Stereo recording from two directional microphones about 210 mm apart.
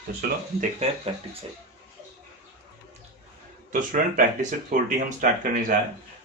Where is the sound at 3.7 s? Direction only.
40° right (ahead or behind).